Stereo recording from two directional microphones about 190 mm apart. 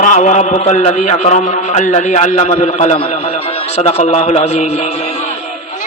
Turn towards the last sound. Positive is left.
turn(degrees=35)  # may be behind; listen again after turning